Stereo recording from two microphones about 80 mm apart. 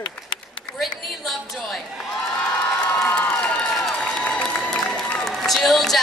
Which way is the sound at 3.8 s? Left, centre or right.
Centre.